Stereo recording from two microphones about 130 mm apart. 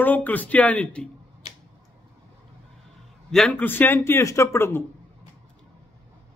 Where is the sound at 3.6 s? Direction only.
15° left (ahead or behind).